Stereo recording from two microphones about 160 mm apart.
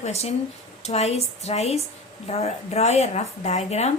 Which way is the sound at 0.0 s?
40° left (ahead or behind).